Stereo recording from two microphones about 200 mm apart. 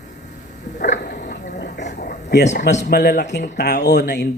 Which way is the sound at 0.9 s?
50° left (ahead or behind).